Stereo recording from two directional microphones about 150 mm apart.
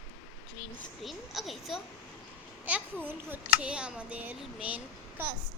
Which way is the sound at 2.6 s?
10° right (ahead or behind).